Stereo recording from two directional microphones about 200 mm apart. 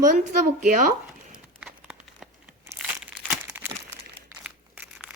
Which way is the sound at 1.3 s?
5° right (ahead or behind).